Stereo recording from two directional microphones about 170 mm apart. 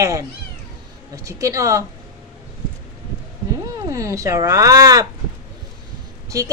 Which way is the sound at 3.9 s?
20° right (ahead or behind).